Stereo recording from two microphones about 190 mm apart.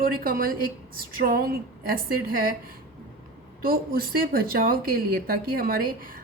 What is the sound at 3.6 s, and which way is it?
Speech, 50° right (ahead or behind).